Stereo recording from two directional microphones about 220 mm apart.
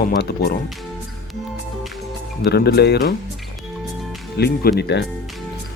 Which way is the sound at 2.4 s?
45° left (ahead or behind).